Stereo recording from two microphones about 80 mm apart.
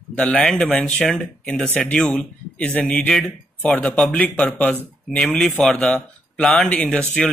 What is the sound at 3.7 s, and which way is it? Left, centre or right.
Speech, left.